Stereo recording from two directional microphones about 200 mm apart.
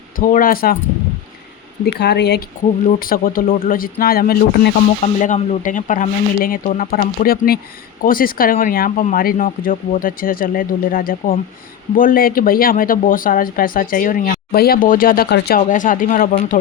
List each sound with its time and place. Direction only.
0.2 s speech: 45° left (ahead or behind)
1.8 s speech: 55° left (ahead or behind)
2.8 s speech: 45° left (ahead or behind)